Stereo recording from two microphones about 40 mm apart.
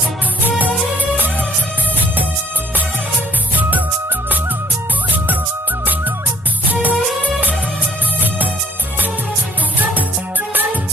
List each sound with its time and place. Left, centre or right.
3.5 s music: right
6.7 s music: right
9.8 s music: right